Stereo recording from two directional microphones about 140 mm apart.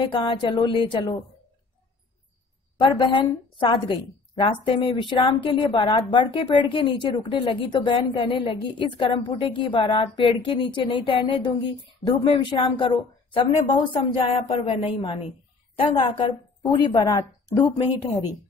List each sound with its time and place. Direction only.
0.0 s a woman's voice: 35° left (ahead or behind)
2.8 s a woman's voice: 35° left (ahead or behind)